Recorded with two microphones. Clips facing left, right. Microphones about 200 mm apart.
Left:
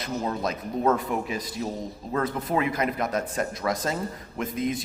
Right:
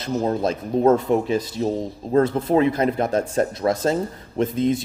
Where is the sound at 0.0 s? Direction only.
30° right (ahead or behind).